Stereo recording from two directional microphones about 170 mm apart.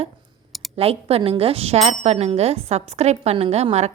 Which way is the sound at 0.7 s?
35° right (ahead or behind).